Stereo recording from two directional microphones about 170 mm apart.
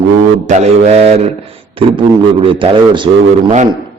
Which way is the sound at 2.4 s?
30° right (ahead or behind).